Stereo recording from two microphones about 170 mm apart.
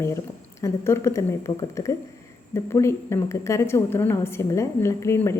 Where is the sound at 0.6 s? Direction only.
15° left (ahead or behind).